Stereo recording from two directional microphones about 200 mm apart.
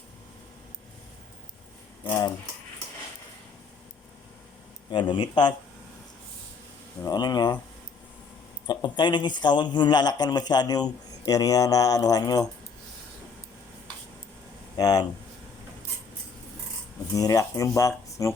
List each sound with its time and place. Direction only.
2.0 s a man's voice: 20° left (ahead or behind)
4.9 s a man's voice: 25° left (ahead or behind)
7.0 s a man's voice: 20° left (ahead or behind)
8.6 s a man's voice: 20° left (ahead or behind)
14.8 s speech: 20° left (ahead or behind)
17.2 s speech: 15° left (ahead or behind)